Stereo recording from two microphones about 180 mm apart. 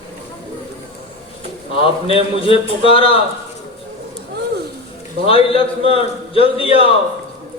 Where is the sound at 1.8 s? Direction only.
30° left (ahead or behind).